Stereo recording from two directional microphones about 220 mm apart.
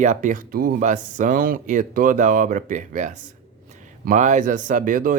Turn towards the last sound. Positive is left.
turn(degrees=-40)  # may be behind; listen again after turning